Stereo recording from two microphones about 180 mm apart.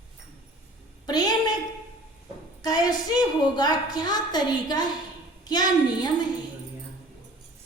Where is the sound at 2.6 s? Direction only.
25° left (ahead or behind).